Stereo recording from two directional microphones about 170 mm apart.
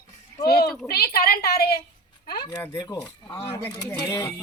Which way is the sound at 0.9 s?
65° left (ahead or behind).